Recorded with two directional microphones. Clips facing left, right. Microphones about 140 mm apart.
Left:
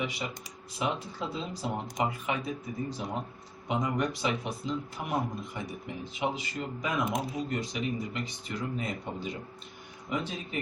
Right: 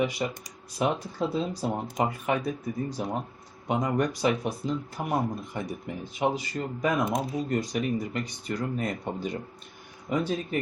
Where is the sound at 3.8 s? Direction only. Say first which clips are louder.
Right 4 dB; 45° right (ahead or behind).